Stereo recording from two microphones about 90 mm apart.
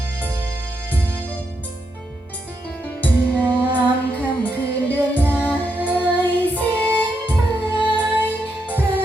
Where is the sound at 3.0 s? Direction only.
15° left (ahead or behind).